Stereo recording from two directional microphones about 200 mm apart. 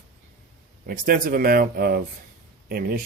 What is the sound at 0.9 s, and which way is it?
Speech, 45° right (ahead or behind).